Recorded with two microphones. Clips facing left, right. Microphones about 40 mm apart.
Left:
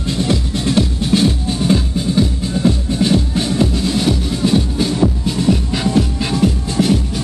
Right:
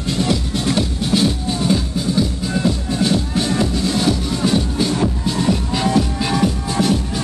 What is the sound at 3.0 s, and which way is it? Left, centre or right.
Music, left.